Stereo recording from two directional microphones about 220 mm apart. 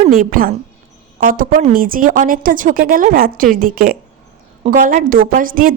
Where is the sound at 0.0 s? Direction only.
40° right (ahead or behind).